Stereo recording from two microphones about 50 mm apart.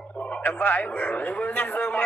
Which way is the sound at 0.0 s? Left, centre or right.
Left.